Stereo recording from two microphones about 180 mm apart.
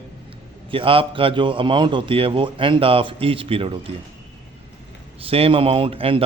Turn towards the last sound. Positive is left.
turn(degrees=-30)  # may be behind; listen again after turning